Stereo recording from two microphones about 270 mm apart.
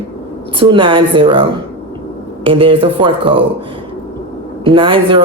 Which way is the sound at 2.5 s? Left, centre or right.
Centre.